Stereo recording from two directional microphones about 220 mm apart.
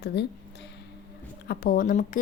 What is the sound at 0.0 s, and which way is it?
Speech, 50° left (ahead or behind).